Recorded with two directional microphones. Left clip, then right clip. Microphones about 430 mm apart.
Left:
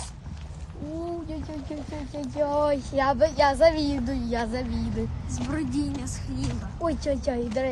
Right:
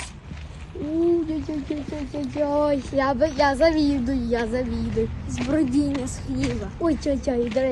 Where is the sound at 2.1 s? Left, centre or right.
Centre.